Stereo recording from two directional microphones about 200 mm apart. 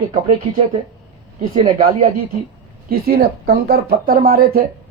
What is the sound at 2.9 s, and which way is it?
Speech, 50° right (ahead or behind).